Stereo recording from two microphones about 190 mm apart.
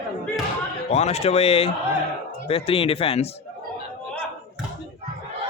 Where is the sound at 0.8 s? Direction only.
35° left (ahead or behind).